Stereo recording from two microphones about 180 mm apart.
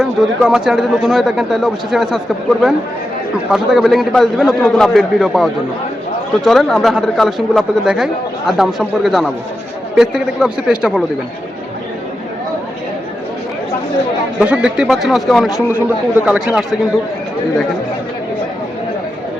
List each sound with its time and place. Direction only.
0.0 s speech: 5° right (ahead or behind)
14.3 s speech: 5° right (ahead or behind)